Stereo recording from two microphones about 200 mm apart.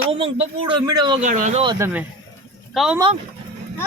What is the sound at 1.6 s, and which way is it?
Speech, 20° right (ahead or behind).